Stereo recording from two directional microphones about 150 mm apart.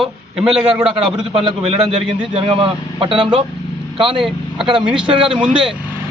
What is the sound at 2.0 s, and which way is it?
A man's voice, 35° right (ahead or behind).